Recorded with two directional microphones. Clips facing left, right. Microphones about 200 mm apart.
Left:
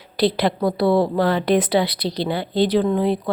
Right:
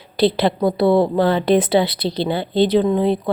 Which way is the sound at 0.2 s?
25° right (ahead or behind).